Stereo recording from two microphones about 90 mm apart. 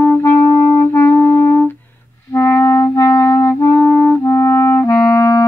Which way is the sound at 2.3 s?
30° left (ahead or behind).